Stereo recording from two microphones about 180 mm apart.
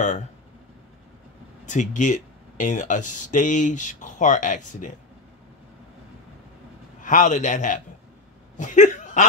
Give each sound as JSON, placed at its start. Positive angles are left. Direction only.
{"t": 1.7, "sound": "speech", "side_deg": 45}
{"t": 7.0, "sound": "speech", "side_deg": 45}